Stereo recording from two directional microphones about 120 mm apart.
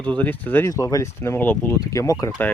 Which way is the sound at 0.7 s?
30° left (ahead or behind).